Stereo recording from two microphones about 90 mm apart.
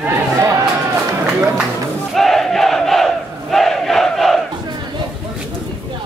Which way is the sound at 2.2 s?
Centre (ahead or behind).